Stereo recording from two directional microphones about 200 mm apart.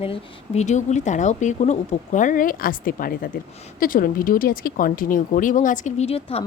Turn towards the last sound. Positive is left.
turn(degrees=30)  # may be behind; listen again after turning